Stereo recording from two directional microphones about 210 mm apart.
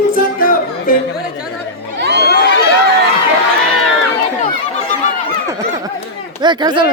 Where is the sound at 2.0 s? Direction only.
50° right (ahead or behind).